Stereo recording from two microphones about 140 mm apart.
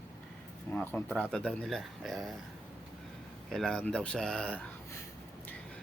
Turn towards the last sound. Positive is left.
turn(degrees=5)  # may be behind; listen again after turning